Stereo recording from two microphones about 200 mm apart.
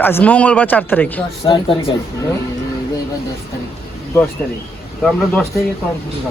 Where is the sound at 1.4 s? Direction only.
25° left (ahead or behind).